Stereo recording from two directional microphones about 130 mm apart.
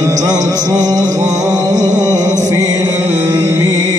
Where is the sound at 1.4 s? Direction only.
25° right (ahead or behind).